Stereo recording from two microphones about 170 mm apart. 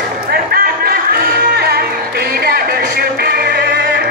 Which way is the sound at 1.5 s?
65° right (ahead or behind).